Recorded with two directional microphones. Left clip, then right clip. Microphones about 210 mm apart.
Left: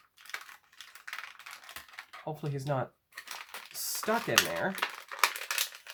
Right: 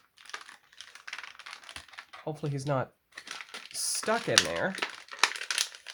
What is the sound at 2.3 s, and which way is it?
Speech, 50° right (ahead or behind).